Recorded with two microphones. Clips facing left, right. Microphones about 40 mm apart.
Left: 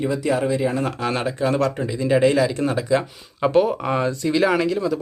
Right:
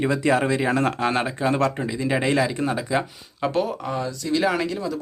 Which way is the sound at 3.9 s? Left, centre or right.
Left.